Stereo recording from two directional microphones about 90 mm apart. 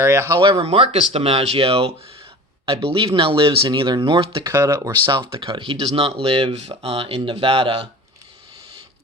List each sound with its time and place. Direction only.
0.0 s speech: 30° right (ahead or behind)
0.6 s speech: 90° right
3.8 s speech: 60° right (ahead or behind)
4.5 s speech: 30° right (ahead or behind)
5.0 s speech: 60° right (ahead or behind); by 7.8 s 90° right